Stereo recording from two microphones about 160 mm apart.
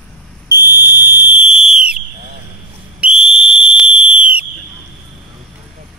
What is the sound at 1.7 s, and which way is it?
Livestock, 5° right (ahead or behind).